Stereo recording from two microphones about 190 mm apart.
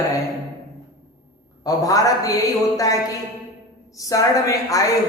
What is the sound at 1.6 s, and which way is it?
Speech, 20° left (ahead or behind).